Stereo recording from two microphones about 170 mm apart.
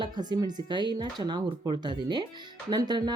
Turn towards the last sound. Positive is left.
turn(degrees=-25)  # may be behind; listen again after turning